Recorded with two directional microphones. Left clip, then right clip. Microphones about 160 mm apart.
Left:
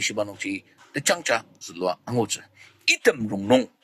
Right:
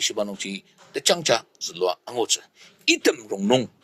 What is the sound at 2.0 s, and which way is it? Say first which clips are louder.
Speech: right 2 dB; 30° right (ahead or behind).